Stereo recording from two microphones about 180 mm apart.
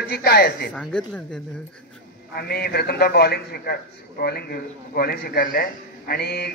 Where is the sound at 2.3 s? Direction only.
60° left (ahead or behind).